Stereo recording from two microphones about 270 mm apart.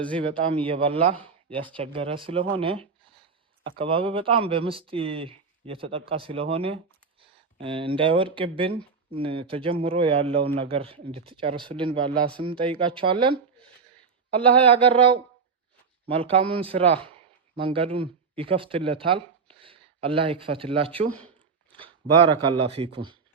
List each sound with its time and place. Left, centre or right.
0.2 s speech: centre
14.9 s speech: centre
16.3 s speech: centre